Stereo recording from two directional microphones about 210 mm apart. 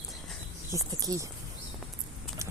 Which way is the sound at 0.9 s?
15° right (ahead or behind).